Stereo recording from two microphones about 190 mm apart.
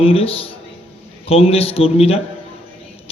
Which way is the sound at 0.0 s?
30° left (ahead or behind).